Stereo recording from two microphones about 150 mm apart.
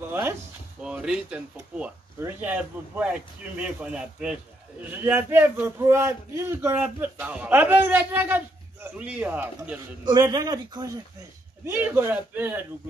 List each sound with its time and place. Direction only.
0.1 s a man's voice: 15° right (ahead or behind)
10.0 s a man's voice: 30° right (ahead or behind)
11.6 s a man's voice: 15° right (ahead or behind)